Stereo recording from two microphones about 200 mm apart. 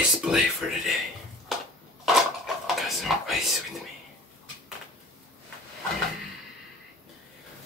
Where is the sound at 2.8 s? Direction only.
Centre (ahead or behind).